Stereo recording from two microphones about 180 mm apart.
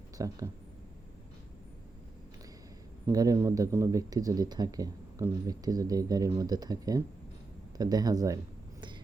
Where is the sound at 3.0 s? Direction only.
20° right (ahead or behind).